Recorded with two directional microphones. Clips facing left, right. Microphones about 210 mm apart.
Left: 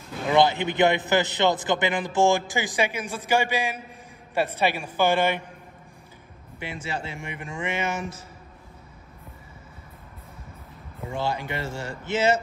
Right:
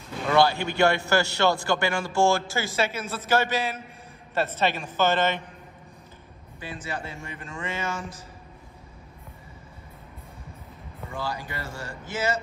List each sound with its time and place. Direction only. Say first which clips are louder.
0.3 s a man's voice: left 1 dB; 20° left (ahead or behind)
6.7 s speech: left 2 dB; 25° left (ahead or behind)
7.2 s a man's voice: left 3 dB; 15° left (ahead or behind)
7.8 s speech: left 3 dB; 25° left (ahead or behind)
11.1 s speech: left 5 dB; 25° left (ahead or behind)